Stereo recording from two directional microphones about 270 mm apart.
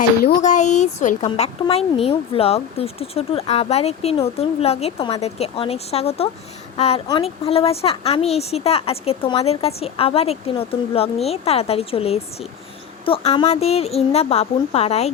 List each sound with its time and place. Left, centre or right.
0.2 s speech: left